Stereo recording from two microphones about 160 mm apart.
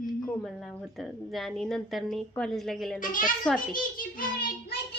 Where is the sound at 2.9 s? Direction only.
55° left (ahead or behind).